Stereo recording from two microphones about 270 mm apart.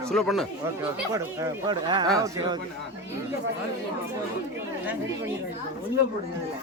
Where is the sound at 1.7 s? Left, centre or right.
Centre.